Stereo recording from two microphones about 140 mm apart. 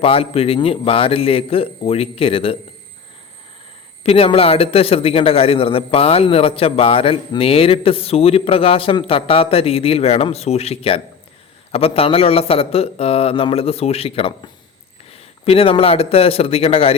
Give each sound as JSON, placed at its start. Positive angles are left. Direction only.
{"t": 0.0, "sound": "a man's voice", "side_deg": 45}
{"t": 4.0, "sound": "a man's voice", "side_deg": 45}